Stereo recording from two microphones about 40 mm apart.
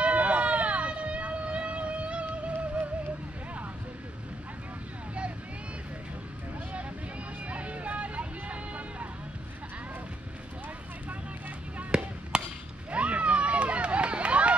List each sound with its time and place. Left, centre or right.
0.0 s vehicle: right
7.4 s music: right
11.9 s chop: centre
12.9 s run: right